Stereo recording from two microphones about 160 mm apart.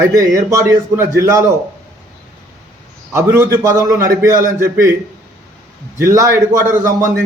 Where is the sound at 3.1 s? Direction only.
15° right (ahead or behind).